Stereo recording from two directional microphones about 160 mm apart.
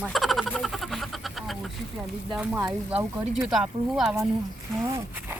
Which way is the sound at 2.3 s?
10° right (ahead or behind).